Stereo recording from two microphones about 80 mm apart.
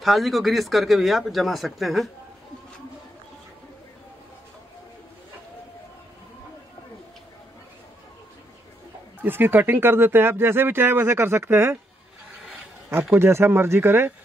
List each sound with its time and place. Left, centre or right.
0.0 s speech: centre
9.2 s speech: right
13.1 s speech: right